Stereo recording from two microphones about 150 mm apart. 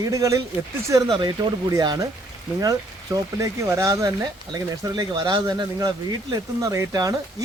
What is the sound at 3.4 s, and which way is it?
Speech, 20° right (ahead or behind).